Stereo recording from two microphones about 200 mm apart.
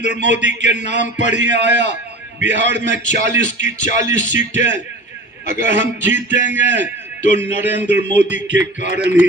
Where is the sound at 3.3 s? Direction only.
40° left (ahead or behind).